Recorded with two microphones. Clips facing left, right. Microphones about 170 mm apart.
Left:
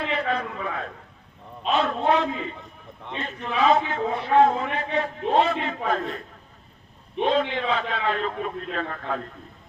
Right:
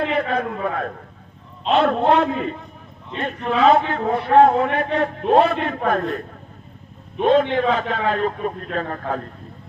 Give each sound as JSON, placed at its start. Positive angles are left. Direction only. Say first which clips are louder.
{"t": 0.0, "sound": "a man's voice", "louder": "right 5 dB", "side_deg": -50}
{"t": 7.3, "sound": "a man's voice", "louder": "right 7 dB", "side_deg": -50}